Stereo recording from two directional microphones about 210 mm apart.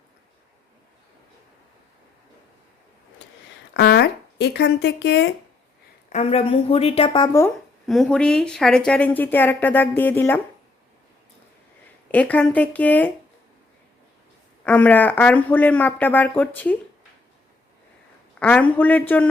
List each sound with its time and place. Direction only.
3.8 s speech: 50° left (ahead or behind)
6.1 s a woman's voice: 30° left (ahead or behind)
7.9 s speech: centre (ahead or behind)
12.1 s speech: 5° left (ahead or behind)
14.6 s speech: 5° left (ahead or behind)
18.3 s speech: 5° left (ahead or behind)